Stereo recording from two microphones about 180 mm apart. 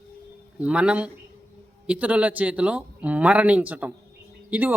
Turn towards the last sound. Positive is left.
turn(degrees=-10)  # may be behind; listen again after turning